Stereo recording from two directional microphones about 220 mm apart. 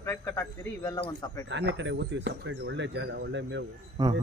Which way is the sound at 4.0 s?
20° right (ahead or behind).